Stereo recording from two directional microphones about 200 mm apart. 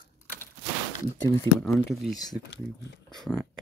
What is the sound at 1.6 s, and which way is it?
Speech, centre (ahead or behind).